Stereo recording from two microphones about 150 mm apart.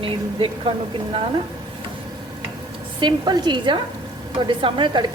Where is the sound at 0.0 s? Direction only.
35° right (ahead or behind).